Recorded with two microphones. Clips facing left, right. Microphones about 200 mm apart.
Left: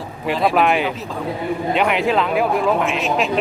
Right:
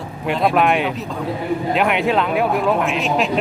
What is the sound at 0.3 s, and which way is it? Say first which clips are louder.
A man's voice: even; centre (ahead or behind).